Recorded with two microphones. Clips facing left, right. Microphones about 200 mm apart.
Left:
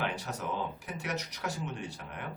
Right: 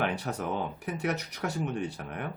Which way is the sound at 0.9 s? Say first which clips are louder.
Right 6 dB; 60° right (ahead or behind).